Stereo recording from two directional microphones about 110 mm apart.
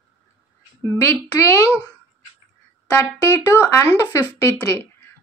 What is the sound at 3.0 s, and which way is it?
Speech, 25° left (ahead or behind).